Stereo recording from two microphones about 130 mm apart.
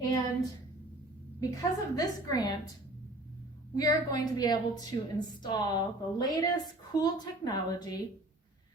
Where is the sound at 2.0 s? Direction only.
30° left (ahead or behind).